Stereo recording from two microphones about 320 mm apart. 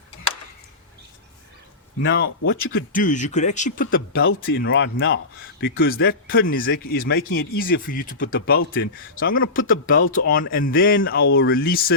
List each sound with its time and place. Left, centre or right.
2.0 s speech: left
4.1 s speech: left
4.4 s speech: left